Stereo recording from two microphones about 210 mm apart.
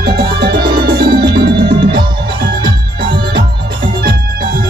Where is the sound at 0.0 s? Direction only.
45° right (ahead or behind).